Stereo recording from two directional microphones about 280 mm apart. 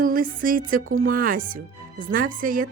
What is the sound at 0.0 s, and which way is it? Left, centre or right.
Speech, right.